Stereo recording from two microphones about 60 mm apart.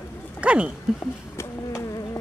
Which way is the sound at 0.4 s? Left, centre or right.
Centre.